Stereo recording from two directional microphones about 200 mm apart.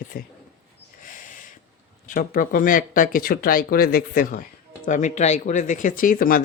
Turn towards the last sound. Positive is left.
turn(degrees=45)  # may be behind; listen again after turning